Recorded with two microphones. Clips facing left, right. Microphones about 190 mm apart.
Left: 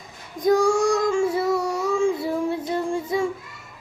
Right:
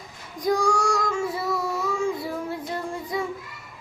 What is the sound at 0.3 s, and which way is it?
Child singing, 25° left (ahead or behind).